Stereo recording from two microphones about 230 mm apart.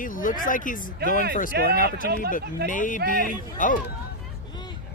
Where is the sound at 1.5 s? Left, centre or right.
Right.